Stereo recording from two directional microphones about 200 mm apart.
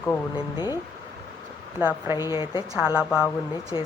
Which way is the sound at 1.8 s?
15° right (ahead or behind).